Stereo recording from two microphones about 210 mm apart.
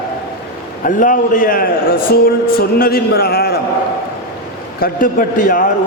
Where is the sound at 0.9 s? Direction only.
40° left (ahead or behind).